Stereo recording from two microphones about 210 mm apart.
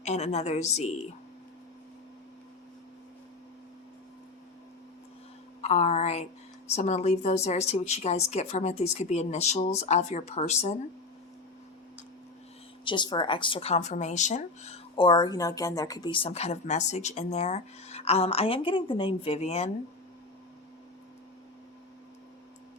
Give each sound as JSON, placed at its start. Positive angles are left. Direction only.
{"t": 0.0, "sound": "speech", "side_deg": 30}
{"t": 5.6, "sound": "speech", "side_deg": 30}
{"t": 12.8, "sound": "speech", "side_deg": 20}